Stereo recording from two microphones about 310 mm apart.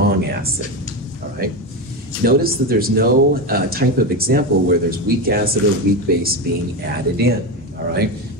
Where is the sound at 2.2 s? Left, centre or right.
Right.